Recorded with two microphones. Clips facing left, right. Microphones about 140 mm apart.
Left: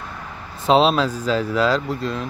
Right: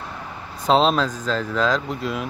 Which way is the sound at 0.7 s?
5° left (ahead or behind).